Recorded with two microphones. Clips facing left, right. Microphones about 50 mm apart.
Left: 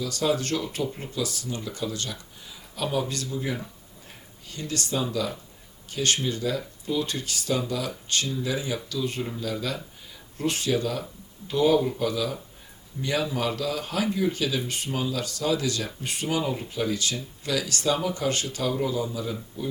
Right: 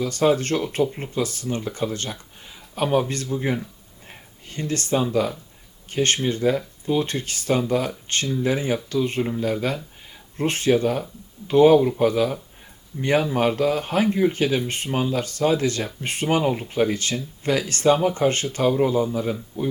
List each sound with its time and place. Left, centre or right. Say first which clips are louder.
0.0 s speech: right 6 dB; right